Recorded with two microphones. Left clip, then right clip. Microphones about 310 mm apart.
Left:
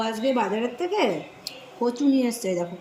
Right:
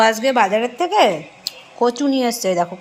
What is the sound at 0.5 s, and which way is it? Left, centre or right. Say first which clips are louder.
Speech: right 9 dB; right.